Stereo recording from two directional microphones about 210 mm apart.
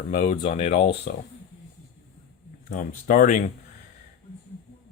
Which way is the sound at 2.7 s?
40° left (ahead or behind).